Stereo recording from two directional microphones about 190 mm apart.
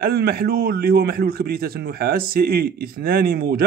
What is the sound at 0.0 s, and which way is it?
A man's voice, 55° right (ahead or behind).